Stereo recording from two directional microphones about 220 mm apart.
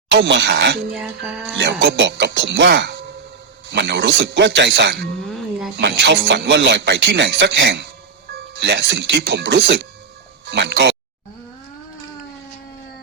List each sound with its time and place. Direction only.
0.1 s speech: 55° right (ahead or behind)
0.9 s speech: 5° right (ahead or behind)
1.5 s speech: 50° right (ahead or behind)
5.2 s music: centre (ahead or behind)
5.7 s speech: 50° right (ahead or behind)